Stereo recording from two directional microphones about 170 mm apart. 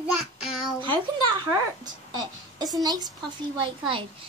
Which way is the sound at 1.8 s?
25° right (ahead or behind).